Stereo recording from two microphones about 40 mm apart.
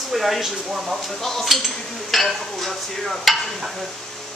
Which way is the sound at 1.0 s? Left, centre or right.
Centre.